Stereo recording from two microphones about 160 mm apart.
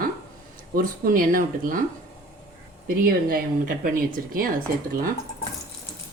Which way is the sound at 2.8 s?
65° right (ahead or behind).